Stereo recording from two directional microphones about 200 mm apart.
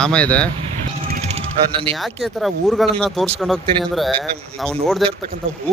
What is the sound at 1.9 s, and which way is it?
Speech, centre (ahead or behind).